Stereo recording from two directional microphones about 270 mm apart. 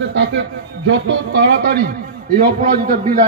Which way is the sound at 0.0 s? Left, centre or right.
Right.